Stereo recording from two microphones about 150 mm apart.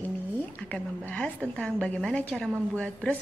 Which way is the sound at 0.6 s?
10° left (ahead or behind).